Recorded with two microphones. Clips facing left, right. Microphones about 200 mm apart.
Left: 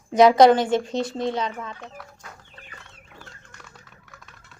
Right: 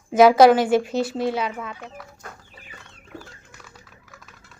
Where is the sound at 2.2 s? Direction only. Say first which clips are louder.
Right 4 dB; 50° right (ahead or behind).